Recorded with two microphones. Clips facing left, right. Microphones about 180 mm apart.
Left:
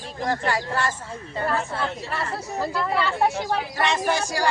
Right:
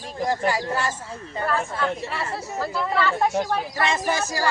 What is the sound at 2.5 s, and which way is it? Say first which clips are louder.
Speech: left 1 dB; 15° left (ahead or behind).